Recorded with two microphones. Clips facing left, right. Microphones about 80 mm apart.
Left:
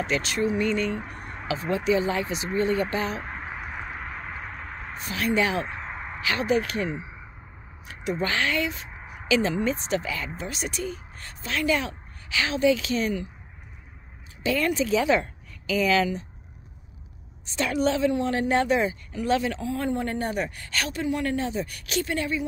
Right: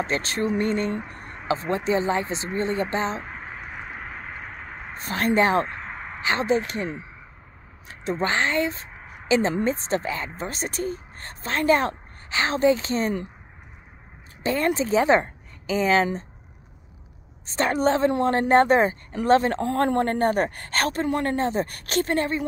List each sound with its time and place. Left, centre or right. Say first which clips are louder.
0.0 s speech: even; right
0.9 s a sound: right 1 dB; centre
1.9 s speech: right 1 dB; right
3.2 s a sound: left 1 dB; centre
4.9 s speech: right 3 dB; right
5.7 s a sound: even; centre
6.2 s speech: right 2 dB; right
7.9 s speech: right 2 dB; right
8.9 s a sound: left 1 dB; centre
9.3 s speech: right 2 dB; right
14.4 s a woman's voice: right 1 dB; right
17.5 s speech: right 3 dB; right
19.6 s a woman's voice: right 6 dB; right